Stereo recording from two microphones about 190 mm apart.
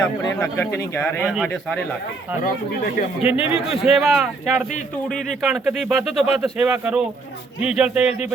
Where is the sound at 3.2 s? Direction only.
30° left (ahead or behind).